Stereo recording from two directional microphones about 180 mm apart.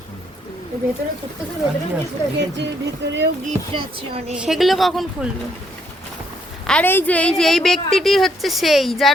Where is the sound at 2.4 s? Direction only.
75° right (ahead or behind).